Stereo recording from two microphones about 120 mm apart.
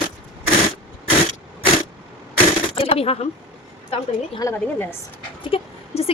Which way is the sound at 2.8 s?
55° left (ahead or behind).